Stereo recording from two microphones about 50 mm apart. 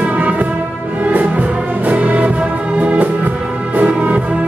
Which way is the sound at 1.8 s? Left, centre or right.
Right.